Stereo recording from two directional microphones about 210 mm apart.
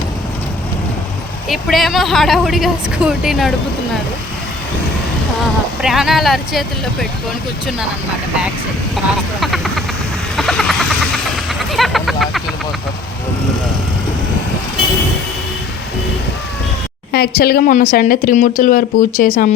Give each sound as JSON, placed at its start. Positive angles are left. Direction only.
{"t": 1.5, "sound": "speech", "side_deg": 0}
{"t": 5.8, "sound": "speech", "side_deg": 0}
{"t": 9.4, "sound": "vehicle", "side_deg": 0}
{"t": 11.7, "sound": "a sound", "side_deg": 0}
{"t": 17.1, "sound": "a woman's voice", "side_deg": 50}